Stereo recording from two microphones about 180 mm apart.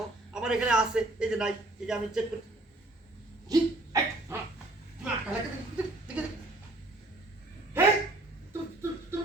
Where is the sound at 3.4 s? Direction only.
20° right (ahead or behind).